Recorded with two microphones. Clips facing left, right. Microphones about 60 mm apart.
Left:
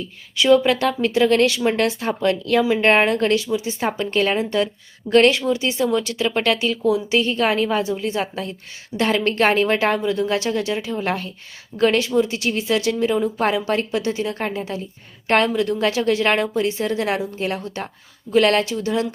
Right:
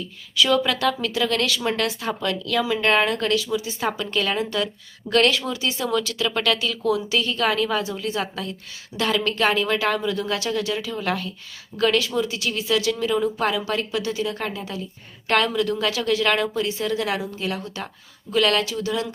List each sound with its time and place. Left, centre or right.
0.3 s speech: left